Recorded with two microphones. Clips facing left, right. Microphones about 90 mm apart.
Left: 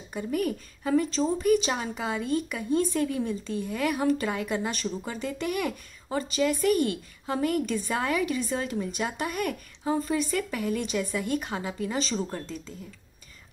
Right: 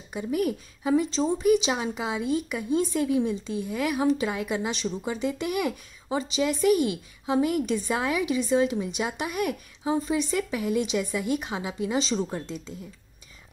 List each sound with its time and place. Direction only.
0.1 s a woman's voice: 5° right (ahead or behind)